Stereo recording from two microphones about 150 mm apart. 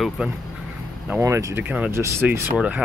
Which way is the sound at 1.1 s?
20° right (ahead or behind).